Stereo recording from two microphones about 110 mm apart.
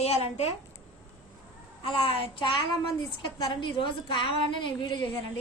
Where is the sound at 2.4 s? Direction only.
45° left (ahead or behind).